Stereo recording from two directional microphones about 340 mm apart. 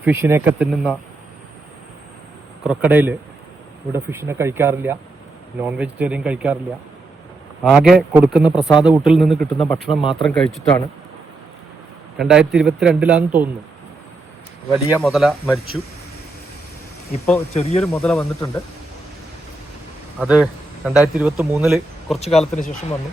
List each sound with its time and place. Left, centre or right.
0.0 s a man's voice: centre
2.6 s a man's voice: centre
7.6 s a man's voice: centre
12.1 s a man's voice: centre
14.9 s a man's voice: centre
17.5 s speech: centre
17.9 s a man's voice: centre
20.1 s a man's voice: centre
22.2 s speech: centre